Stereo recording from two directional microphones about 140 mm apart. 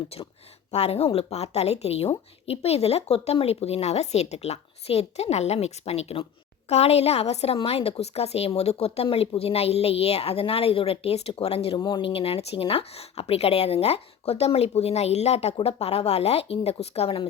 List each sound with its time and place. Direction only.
0.1 s speech: 45° left (ahead or behind)